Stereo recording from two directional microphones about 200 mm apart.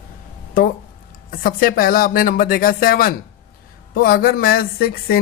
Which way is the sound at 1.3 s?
45° left (ahead or behind).